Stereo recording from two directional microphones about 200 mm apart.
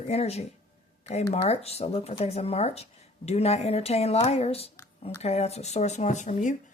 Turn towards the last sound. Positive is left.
turn(degrees=40)  # may be behind; listen again after turning